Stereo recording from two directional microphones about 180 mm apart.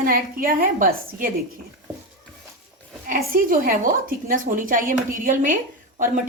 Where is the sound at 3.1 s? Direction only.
50° right (ahead or behind).